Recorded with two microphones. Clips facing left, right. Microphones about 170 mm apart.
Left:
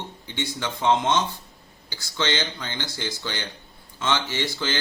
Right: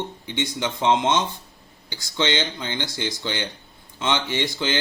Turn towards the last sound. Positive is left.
turn(degrees=-20)  # may be behind; listen again after turning